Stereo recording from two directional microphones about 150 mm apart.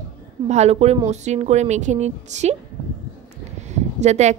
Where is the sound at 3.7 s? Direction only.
50° right (ahead or behind).